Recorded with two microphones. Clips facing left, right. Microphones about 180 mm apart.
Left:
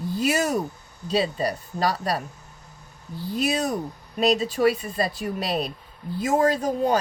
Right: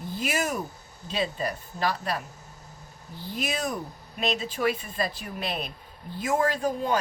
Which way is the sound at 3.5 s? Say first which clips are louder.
Left 5 dB; 40° left (ahead or behind).